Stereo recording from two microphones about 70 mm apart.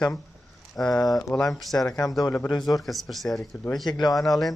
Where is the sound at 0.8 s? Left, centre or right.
Centre.